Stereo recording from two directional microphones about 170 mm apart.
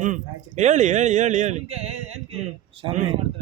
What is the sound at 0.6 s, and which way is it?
Speech, 45° right (ahead or behind).